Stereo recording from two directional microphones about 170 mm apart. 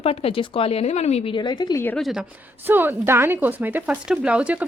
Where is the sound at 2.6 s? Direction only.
10° right (ahead or behind).